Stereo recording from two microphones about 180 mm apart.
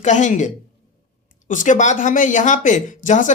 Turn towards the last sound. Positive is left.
turn(degrees=45)  # may be behind; listen again after turning